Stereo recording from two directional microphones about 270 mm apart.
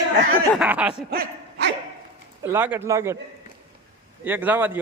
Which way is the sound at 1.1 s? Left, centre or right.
Right.